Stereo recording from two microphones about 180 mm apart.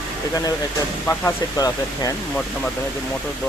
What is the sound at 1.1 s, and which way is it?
Speech, 15° left (ahead or behind).